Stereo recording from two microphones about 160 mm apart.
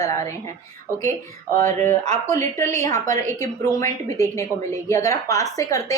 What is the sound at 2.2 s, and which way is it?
A woman's voice, 15° left (ahead or behind).